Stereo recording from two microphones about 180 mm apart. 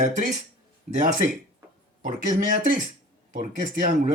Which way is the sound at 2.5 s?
50° right (ahead or behind).